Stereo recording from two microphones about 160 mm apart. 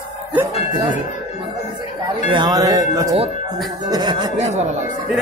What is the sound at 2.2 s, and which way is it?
Speech, 25° right (ahead or behind).